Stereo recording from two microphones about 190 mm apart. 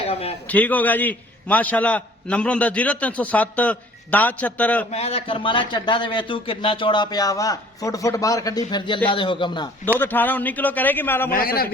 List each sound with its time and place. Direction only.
0.0 s a man's voice: 30° left (ahead or behind)
0.5 s a man's voice: 10° left (ahead or behind)
4.9 s a man's voice: 30° left (ahead or behind)
10.0 s a man's voice: 10° left (ahead or behind)
11.3 s a man's voice: 50° left (ahead or behind)